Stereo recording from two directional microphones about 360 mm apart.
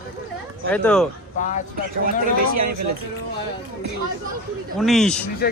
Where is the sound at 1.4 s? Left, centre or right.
Left.